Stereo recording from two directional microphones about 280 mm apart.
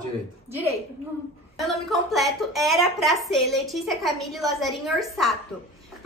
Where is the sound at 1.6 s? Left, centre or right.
Centre.